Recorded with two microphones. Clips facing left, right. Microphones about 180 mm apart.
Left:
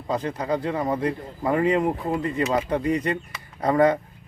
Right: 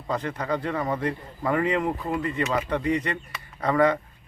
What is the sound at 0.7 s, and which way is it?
Speech, 15° left (ahead or behind).